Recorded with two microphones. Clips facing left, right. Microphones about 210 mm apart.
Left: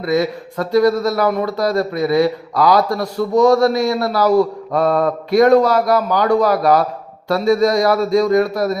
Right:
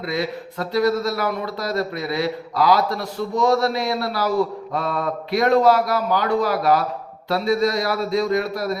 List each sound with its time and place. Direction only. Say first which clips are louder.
0.0 s a man's voice: left 7 dB; 45° left (ahead or behind)